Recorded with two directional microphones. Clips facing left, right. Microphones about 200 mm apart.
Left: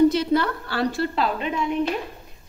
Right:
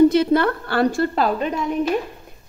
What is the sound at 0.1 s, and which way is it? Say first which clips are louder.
A woman's voice: right 5 dB; 55° right (ahead or behind).